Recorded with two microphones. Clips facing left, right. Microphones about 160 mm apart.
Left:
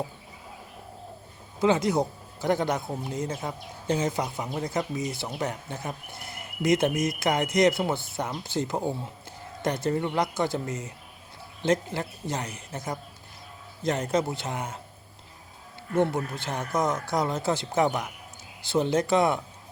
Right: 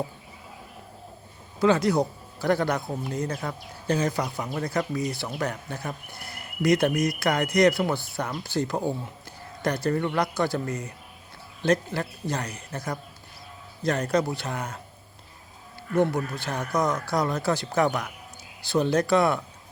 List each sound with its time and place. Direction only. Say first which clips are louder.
1.5 s speech: right 2 dB; 20° left (ahead or behind)
16.0 s speech: right 1 dB; 25° left (ahead or behind)